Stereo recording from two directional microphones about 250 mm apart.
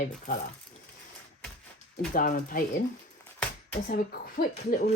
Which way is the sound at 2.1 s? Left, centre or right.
Left.